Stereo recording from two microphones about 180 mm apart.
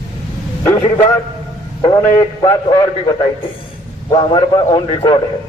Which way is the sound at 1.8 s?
20° left (ahead or behind).